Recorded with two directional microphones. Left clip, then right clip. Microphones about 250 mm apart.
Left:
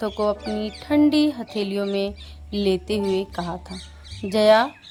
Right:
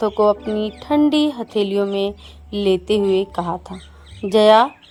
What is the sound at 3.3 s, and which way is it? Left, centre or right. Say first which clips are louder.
Speech: right 6 dB; right.